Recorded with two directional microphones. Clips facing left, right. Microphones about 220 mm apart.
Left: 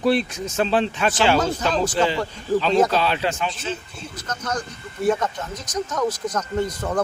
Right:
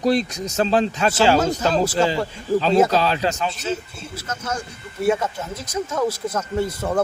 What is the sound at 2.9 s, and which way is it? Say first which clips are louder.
Speech: right 2 dB; 40° right (ahead or behind).